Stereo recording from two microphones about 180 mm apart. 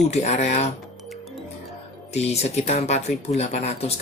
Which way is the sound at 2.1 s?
35° left (ahead or behind).